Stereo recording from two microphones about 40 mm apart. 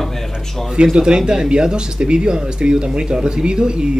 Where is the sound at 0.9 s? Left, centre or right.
Right.